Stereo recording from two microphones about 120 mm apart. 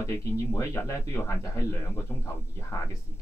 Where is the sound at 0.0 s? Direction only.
25° left (ahead or behind).